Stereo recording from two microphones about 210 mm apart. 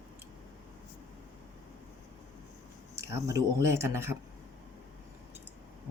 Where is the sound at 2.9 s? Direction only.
15° right (ahead or behind).